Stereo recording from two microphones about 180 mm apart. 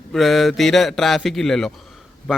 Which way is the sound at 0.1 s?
Centre (ahead or behind).